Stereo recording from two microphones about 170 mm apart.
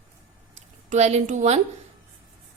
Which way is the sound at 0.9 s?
40° right (ahead or behind).